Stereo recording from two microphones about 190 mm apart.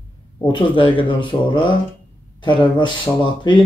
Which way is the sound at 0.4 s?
25° left (ahead or behind).